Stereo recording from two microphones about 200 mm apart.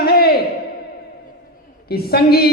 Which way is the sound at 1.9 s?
50° left (ahead or behind).